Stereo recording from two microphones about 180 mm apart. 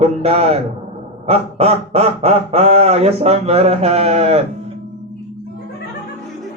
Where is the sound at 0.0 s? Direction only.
35° right (ahead or behind).